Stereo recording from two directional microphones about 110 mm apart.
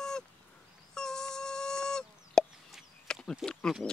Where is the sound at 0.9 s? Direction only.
5° left (ahead or behind).